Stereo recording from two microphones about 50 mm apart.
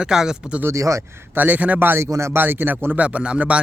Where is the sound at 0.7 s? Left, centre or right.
Right.